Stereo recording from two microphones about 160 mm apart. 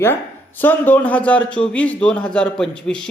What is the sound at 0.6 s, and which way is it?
Speech, 10° left (ahead or behind).